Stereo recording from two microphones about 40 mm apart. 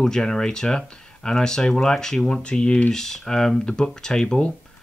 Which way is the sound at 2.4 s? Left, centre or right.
Left.